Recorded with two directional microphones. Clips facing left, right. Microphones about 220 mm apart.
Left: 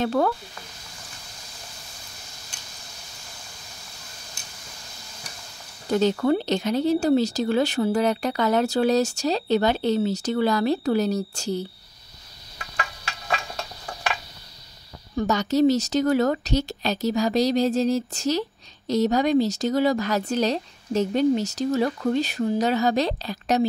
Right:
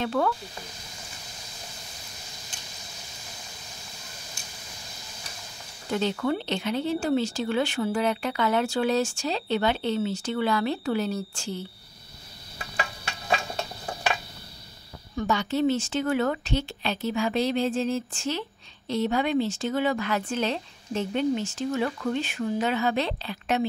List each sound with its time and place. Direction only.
0.0 s speech: 40° left (ahead or behind)
5.9 s speech: 40° left (ahead or behind)
13.3 s a sound: 25° right (ahead or behind)
15.1 s speech: 40° left (ahead or behind)